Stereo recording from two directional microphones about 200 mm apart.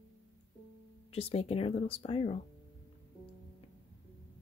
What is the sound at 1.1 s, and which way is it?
Speech, 30° left (ahead or behind).